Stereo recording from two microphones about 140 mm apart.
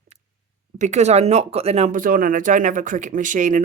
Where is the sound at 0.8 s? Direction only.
55° right (ahead or behind).